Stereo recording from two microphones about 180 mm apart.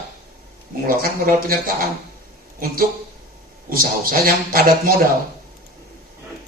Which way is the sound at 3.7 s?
50° right (ahead or behind).